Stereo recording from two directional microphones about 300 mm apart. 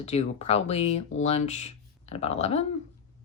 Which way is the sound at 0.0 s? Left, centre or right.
Left.